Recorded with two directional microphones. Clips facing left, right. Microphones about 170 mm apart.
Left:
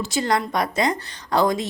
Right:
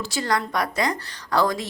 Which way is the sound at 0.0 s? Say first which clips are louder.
Left 3 dB; 20° left (ahead or behind).